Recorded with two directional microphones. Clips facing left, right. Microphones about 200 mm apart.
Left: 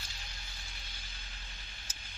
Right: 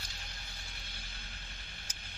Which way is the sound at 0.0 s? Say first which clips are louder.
Right 1 dB; 55° right (ahead or behind).